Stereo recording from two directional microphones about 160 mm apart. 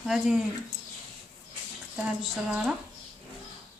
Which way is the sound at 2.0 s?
5° right (ahead or behind).